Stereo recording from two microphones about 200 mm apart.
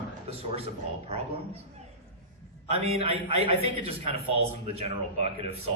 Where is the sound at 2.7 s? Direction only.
30° right (ahead or behind).